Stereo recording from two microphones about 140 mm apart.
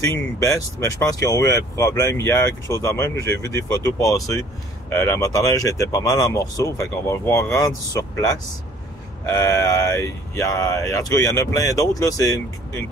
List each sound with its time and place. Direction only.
0.0 s speech: 20° left (ahead or behind)
9.3 s speech: 25° left (ahead or behind)